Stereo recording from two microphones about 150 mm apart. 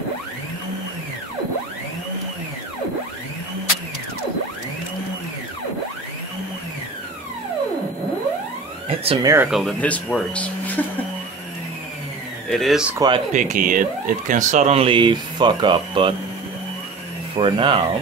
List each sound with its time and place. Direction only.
8.8 s a sound: 35° right (ahead or behind)
9.2 s speech: 20° right (ahead or behind)
9.5 s speech: centre (ahead or behind)
12.4 s speech: centre (ahead or behind)
13.3 s speech: 55° right (ahead or behind); by 16.2 s 35° right (ahead or behind)
17.4 s speech: 35° right (ahead or behind)